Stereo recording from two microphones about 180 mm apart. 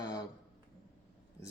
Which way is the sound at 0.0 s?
20° left (ahead or behind).